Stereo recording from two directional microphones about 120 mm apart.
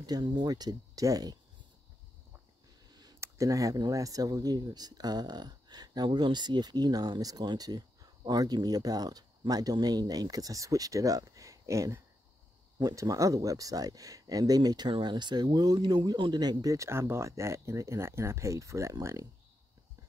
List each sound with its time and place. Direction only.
0.0 s speech: 40° right (ahead or behind)
2.9 s a sound: 35° right (ahead or behind)
3.2 s speech: 25° right (ahead or behind)